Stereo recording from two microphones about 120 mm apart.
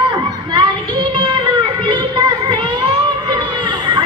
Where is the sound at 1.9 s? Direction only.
40° right (ahead or behind).